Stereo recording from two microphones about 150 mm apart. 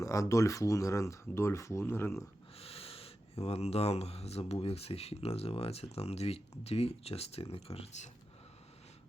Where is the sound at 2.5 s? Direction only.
40° left (ahead or behind).